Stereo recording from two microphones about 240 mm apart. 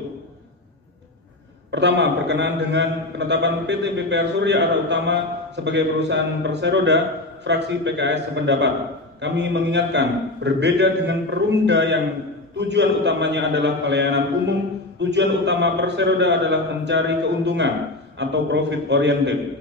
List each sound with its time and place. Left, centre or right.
1.7 s a man's voice: right